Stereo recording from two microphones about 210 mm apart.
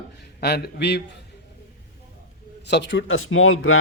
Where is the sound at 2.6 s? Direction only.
55° left (ahead or behind); by 3.8 s 75° left (ahead or behind).